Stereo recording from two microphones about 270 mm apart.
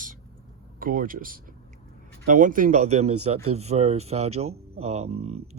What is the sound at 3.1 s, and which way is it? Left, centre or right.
Speech, right.